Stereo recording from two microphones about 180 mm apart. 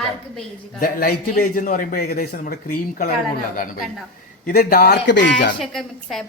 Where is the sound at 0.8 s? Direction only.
55° left (ahead or behind).